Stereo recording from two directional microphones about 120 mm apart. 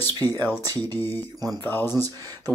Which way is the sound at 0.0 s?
30° right (ahead or behind).